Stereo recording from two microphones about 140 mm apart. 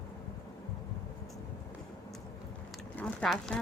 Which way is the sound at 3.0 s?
5° left (ahead or behind).